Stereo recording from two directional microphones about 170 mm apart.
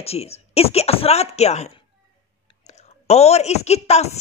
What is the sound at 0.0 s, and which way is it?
A woman's voice, 35° left (ahead or behind).